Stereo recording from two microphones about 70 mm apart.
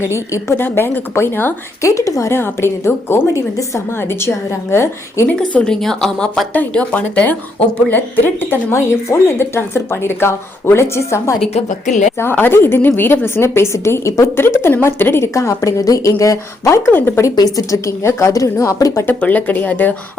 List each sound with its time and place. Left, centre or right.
0.0 s speech: left
1.8 s a woman's voice: left
2.3 s speech: left
4.7 s speech: left
5.4 s speech: centre
6.5 s speech: left
8.7 s speech: left
12.2 s speech: left
15.4 s a woman's voice: left
16.9 s speech: left
17.7 s a woman's voice: left
19.0 s speech: left